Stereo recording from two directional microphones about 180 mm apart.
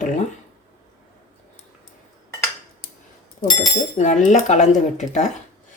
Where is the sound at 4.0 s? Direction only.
40° left (ahead or behind).